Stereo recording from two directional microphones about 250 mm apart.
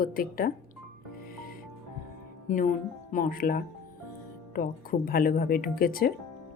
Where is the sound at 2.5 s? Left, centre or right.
Left.